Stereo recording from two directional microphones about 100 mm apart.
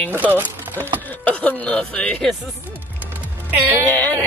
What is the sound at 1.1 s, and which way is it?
Speech, 15° left (ahead or behind).